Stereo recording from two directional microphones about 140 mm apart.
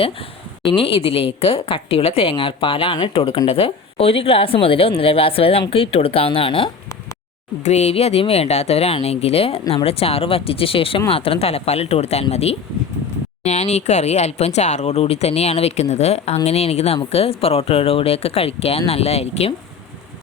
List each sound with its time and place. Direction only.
0.8 s a woman's voice: 40° left (ahead or behind)
7.6 s speech: 50° left (ahead or behind)